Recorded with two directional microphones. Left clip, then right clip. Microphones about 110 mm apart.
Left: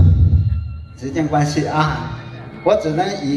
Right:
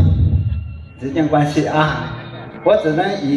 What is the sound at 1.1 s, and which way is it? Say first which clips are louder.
A man's voice: right 3 dB; 20° right (ahead or behind).